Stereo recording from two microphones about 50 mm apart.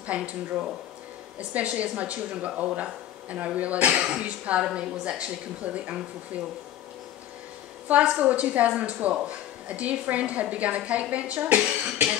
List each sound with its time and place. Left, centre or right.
0.0 s speech: right
7.9 s speech: right